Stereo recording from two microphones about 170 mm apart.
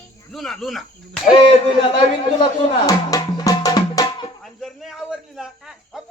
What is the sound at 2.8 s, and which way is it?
Music, 20° left (ahead or behind).